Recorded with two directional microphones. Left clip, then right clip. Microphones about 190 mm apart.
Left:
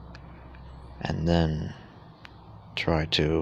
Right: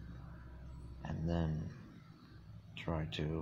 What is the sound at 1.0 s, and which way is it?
Speech, 50° left (ahead or behind).